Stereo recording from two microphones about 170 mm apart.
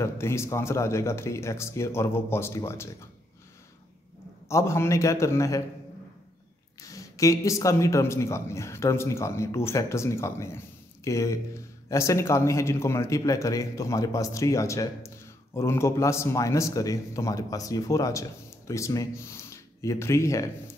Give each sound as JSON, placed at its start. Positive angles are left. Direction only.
{"t": 0.0, "sound": "a man's voice", "side_deg": 15}
{"t": 4.5, "sound": "a man's voice", "side_deg": 15}
{"t": 6.8, "sound": "a man's voice", "side_deg": 20}